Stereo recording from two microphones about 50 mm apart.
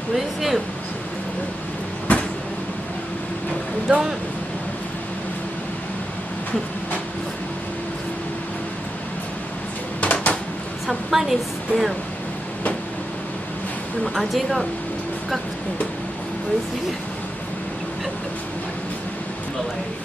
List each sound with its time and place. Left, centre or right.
0.1 s speech: centre
2.1 s vehicle: left
3.9 s speech: centre
9.9 s a sound: left
10.9 s a woman's voice: centre
14.0 s speech: centre